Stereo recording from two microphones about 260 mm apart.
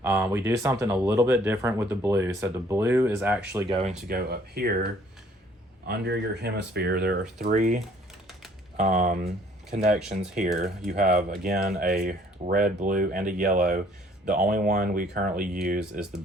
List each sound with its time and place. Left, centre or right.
0.0 s speech: centre
4.1 s speech: right
5.9 s speech: right
8.8 s speech: right
15.8 s speech: centre